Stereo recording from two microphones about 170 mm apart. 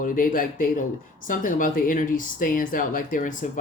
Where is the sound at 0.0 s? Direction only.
55° left (ahead or behind).